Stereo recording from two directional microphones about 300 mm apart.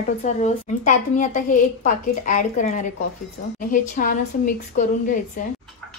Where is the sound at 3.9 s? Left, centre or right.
Left.